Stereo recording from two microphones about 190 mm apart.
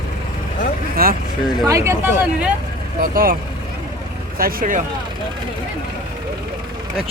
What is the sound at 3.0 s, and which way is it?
Speech, 50° right (ahead or behind).